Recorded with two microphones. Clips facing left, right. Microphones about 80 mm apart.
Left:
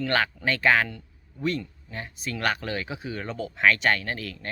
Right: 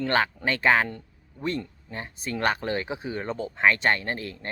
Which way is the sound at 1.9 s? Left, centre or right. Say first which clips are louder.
Right 2 dB; right.